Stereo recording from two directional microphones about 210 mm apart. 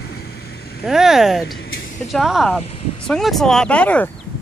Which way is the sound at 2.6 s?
30° left (ahead or behind).